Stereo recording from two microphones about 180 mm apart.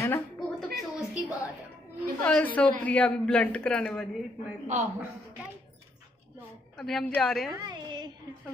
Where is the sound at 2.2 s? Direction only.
10° left (ahead or behind).